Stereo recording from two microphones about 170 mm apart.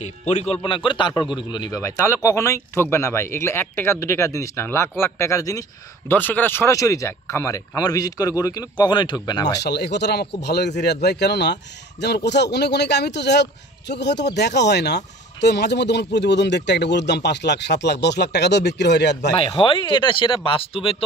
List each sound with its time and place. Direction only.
0.0 s speech: 45° left (ahead or behind)
0.6 s speech: 30° left (ahead or behind)
9.6 s speech: 80° left
19.3 s speech: 30° left (ahead or behind)